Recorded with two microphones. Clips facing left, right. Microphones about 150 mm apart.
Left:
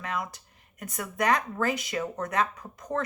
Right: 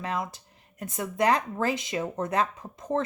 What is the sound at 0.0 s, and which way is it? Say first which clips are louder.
Speech: right 2 dB; 30° right (ahead or behind).